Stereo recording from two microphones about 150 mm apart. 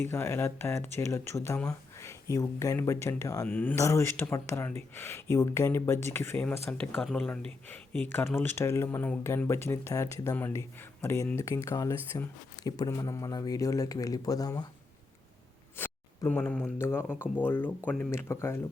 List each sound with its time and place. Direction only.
0.0 s speech: 15° left (ahead or behind)
15.8 s speech: 10° left (ahead or behind)